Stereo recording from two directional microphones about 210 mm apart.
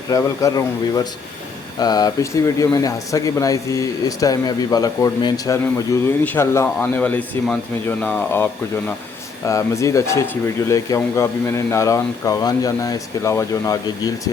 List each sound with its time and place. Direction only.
0.1 s speech: 15° left (ahead or behind)
9.5 s speech: 15° left (ahead or behind)